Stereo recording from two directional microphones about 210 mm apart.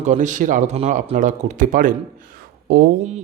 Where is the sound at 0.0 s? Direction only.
35° right (ahead or behind).